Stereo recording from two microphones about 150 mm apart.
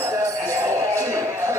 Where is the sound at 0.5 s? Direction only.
20° right (ahead or behind).